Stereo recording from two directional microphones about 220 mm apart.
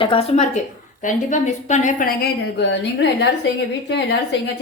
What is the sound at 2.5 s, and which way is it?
A woman's voice, 50° left (ahead or behind).